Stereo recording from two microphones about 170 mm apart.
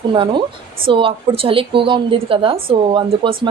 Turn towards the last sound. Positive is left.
turn(degrees=-30)  # may be behind; listen again after turning